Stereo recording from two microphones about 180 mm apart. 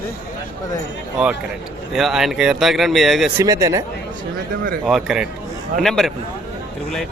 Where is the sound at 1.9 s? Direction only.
Centre (ahead or behind).